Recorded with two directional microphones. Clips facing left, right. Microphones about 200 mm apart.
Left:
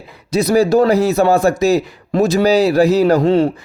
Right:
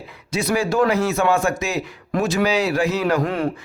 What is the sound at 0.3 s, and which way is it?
A man's voice, 35° left (ahead or behind).